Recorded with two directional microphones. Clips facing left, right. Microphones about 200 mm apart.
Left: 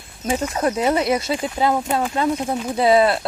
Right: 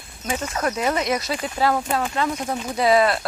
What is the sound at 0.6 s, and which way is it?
Speech, 30° left (ahead or behind).